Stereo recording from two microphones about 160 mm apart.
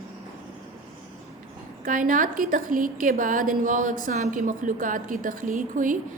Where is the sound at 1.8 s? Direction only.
60° right (ahead or behind).